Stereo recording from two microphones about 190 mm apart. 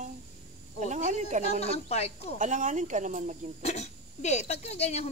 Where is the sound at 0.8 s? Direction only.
40° right (ahead or behind).